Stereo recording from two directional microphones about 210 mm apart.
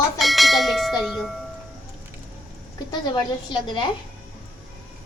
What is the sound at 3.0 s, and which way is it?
Speech, 20° left (ahead or behind).